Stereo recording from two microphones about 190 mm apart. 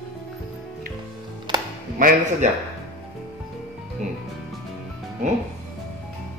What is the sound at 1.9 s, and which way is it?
Speech, 45° right (ahead or behind).